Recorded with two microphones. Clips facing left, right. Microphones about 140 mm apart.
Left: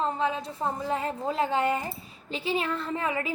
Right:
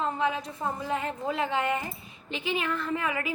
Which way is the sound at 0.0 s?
30° left (ahead or behind).